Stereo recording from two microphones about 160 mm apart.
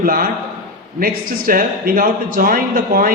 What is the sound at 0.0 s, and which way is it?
A man's voice, 65° right (ahead or behind).